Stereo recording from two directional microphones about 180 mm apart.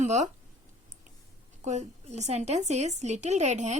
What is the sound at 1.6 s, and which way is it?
A woman's voice, 40° right (ahead or behind).